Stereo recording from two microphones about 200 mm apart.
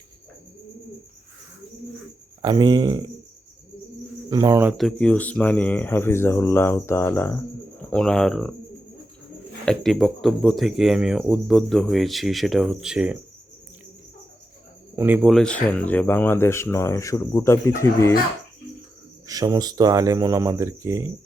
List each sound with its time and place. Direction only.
2.4 s speech: 20° right (ahead or behind)
4.3 s speech: 20° right (ahead or behind)
4.8 s speech: 5° left (ahead or behind)
9.6 s speech: centre (ahead or behind)
14.9 s speech: 10° right (ahead or behind); by 18.1 s 15° left (ahead or behind)
19.3 s speech: 15° right (ahead or behind)